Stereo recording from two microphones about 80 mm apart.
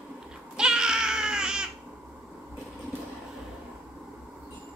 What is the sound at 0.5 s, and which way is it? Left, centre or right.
Baby cry, centre.